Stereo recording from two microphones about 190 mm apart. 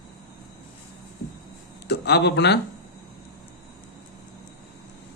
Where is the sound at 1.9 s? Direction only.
60° left (ahead or behind).